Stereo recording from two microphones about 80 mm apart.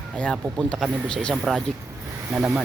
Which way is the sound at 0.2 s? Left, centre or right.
Centre.